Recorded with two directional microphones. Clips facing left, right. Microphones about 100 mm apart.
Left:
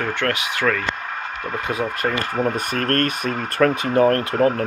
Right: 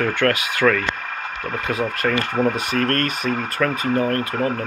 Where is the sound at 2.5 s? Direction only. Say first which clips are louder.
Even; 50° left (ahead or behind).